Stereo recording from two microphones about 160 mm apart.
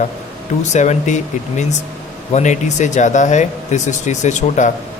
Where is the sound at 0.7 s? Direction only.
50° left (ahead or behind).